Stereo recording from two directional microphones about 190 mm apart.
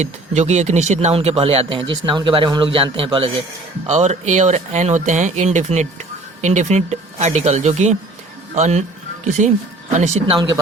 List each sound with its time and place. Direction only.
0.0 s speech: 35° right (ahead or behind)